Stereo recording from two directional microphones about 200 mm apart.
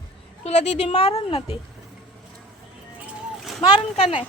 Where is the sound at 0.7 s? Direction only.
30° left (ahead or behind).